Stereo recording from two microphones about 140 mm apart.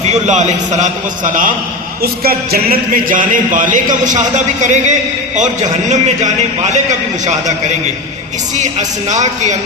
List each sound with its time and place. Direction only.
0.1 s a man's voice: 60° right (ahead or behind)
2.0 s a man's voice: 90° right; by 6.7 s 60° right (ahead or behind)
8.5 s a man's voice: 55° right (ahead or behind)